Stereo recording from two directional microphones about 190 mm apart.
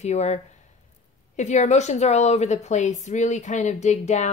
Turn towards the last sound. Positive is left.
turn(degrees=35)  # may be behind; listen again after turning